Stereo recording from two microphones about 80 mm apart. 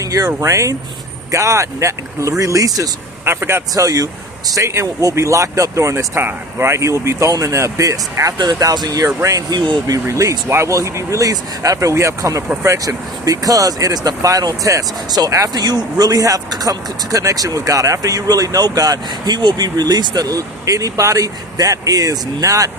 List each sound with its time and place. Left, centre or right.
0.0 s speech: right
3.2 s speech: right
8.5 s speech: right
9.0 s speech: right
9.5 s speech: right
10.1 s speech: right